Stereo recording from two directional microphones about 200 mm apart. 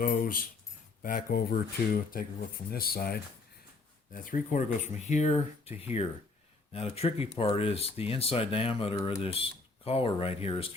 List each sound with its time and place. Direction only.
0.0 s speech: 45° left (ahead or behind); by 10.7 s 30° left (ahead or behind)